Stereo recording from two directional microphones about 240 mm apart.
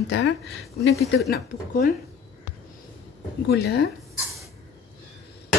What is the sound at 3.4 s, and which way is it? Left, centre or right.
Speech, left.